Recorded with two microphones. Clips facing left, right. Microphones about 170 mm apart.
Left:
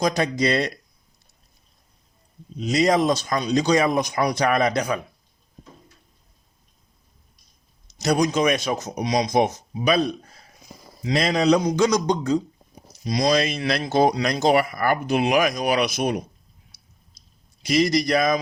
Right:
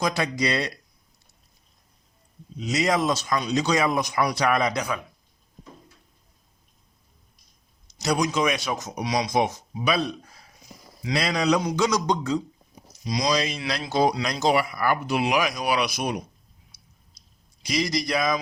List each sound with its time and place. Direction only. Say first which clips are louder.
0.0 s speech: left 4 dB; 40° left (ahead or behind)
2.7 s speech: left 4 dB; 35° left (ahead or behind)
4.4 s speech: left 3 dB; 50° left (ahead or behind)
7.9 s speech: left 3 dB; 45° left (ahead or behind)
12.9 s speech: left 4 dB; 55° left (ahead or behind)
17.6 s speech: left 6 dB; 55° left (ahead or behind)